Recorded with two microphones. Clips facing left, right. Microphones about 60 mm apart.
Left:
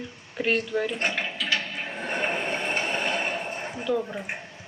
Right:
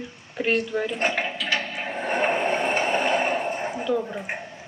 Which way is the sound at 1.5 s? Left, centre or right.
Centre.